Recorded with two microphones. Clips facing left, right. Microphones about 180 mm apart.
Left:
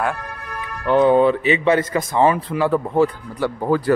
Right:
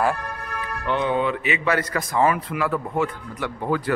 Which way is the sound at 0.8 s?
40° left (ahead or behind).